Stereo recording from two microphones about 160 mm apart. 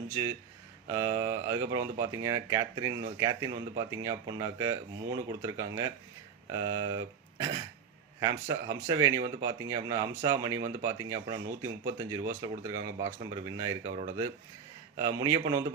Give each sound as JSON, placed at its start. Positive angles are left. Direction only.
{"t": 0.9, "sound": "speech", "side_deg": -20}
{"t": 14.9, "sound": "speech", "side_deg": -20}